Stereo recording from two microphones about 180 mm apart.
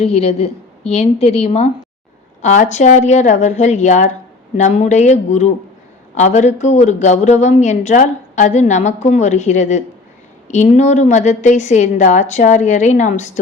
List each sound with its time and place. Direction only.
0.0 s speech: 35° left (ahead or behind)